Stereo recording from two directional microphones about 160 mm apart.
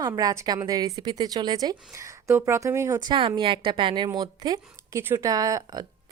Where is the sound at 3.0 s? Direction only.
30° right (ahead or behind).